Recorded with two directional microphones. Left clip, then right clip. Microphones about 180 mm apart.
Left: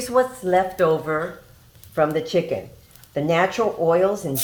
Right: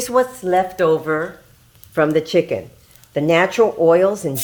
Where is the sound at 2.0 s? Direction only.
85° right.